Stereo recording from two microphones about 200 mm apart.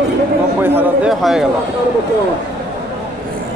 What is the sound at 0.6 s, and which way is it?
Speech, 5° right (ahead or behind).